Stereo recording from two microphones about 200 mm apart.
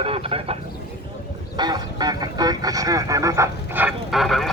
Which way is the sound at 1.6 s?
20° right (ahead or behind).